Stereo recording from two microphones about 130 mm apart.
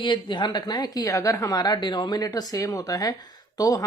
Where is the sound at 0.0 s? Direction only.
35° left (ahead or behind).